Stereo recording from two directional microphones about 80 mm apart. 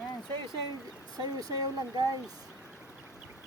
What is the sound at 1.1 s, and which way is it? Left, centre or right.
Speech, right.